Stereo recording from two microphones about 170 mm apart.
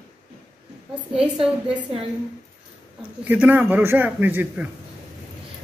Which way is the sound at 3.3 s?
10° right (ahead or behind).